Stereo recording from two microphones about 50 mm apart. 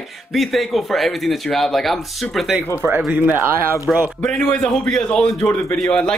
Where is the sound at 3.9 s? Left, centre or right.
Centre.